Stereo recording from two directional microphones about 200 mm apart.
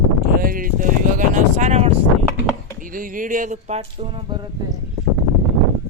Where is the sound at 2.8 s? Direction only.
45° right (ahead or behind); by 4.4 s 30° right (ahead or behind).